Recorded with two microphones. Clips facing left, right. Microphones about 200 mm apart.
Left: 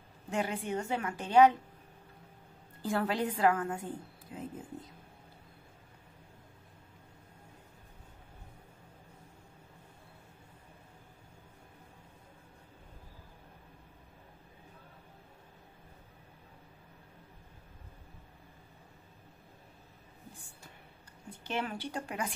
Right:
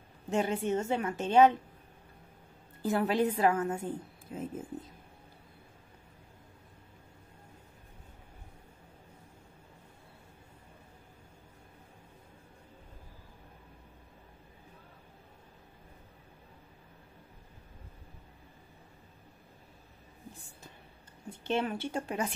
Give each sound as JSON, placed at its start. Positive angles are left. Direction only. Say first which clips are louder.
{"t": 0.3, "sound": "a woman's voice", "louder": "right 4 dB", "side_deg": -25}
{"t": 2.9, "sound": "a woman's voice", "louder": "right 4 dB", "side_deg": -20}
{"t": 21.3, "sound": "a woman's voice", "louder": "right 5 dB", "side_deg": -25}